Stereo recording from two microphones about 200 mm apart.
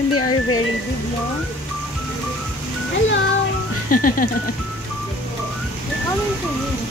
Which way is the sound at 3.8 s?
45° left (ahead or behind).